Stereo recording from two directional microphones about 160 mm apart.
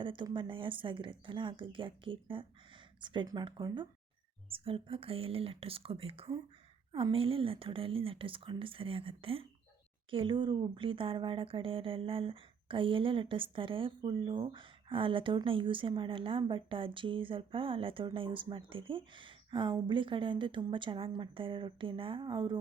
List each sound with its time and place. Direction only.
0.0 s speech: 30° right (ahead or behind)